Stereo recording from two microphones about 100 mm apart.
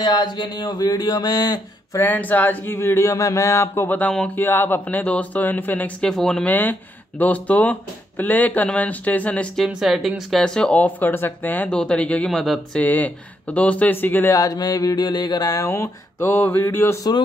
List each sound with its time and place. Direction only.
0.0 s a sound: 45° left (ahead or behind)
2.0 s speech: 20° left (ahead or behind)
6.4 s speech: 20° left (ahead or behind)
9.7 s speech: 5° right (ahead or behind)
12.8 s speech: 15° left (ahead or behind)
14.3 s a sound: 35° left (ahead or behind)
15.7 s speech: 25° left (ahead or behind)